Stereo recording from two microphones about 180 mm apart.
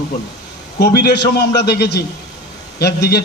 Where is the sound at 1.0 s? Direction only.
65° left (ahead or behind).